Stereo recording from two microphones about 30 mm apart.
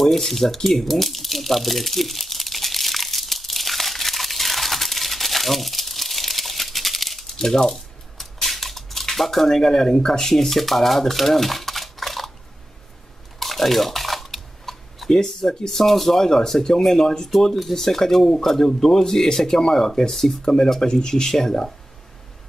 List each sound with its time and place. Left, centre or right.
0.0 s a man's voice: centre
1.0 s crumpling: centre
7.3 s a man's voice: centre
7.7 s a sound: centre
9.6 s speech: centre
13.4 s typing: centre
16.8 s a man's voice: centre